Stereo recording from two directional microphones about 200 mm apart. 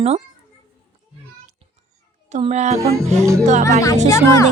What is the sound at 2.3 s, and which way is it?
A woman's voice, 35° right (ahead or behind).